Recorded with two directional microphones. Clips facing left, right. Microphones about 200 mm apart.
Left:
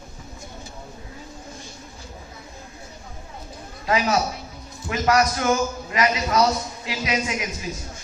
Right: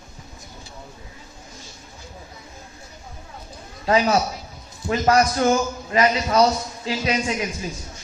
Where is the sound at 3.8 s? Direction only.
35° right (ahead or behind).